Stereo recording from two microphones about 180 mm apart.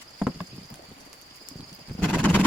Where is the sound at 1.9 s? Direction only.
5° left (ahead or behind).